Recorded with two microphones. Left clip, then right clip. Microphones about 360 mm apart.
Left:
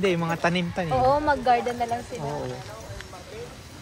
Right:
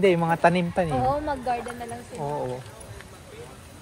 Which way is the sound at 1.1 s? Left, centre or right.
Left.